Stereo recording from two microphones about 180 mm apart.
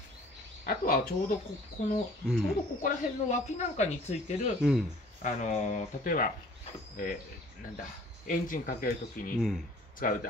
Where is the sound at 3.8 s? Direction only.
40° left (ahead or behind).